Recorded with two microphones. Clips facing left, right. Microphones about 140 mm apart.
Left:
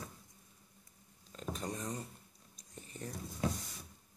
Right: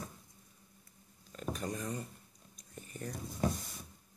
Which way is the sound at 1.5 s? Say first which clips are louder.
Right 2 dB; 25° left (ahead or behind).